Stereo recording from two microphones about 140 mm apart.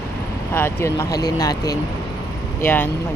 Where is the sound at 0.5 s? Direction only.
15° left (ahead or behind).